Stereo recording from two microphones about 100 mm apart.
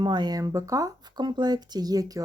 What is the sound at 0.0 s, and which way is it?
Speech, 45° right (ahead or behind).